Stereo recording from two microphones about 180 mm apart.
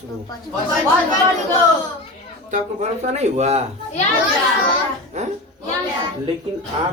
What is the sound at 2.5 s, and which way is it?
Speech, 40° right (ahead or behind).